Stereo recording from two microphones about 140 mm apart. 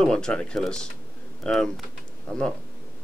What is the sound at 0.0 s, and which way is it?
Speech, 5° left (ahead or behind).